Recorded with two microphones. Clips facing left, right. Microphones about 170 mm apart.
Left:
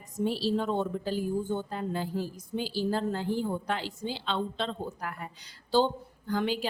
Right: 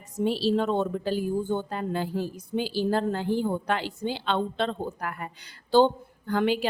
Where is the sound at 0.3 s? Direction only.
80° right.